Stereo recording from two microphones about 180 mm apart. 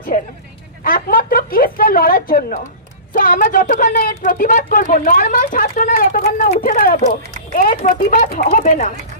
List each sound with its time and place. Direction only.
0.9 s speech: 50° left (ahead or behind)